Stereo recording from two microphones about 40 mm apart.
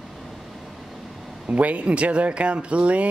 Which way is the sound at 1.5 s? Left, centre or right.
Right.